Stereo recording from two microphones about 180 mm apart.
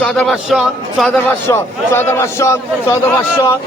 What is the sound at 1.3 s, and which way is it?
Speech, 15° left (ahead or behind).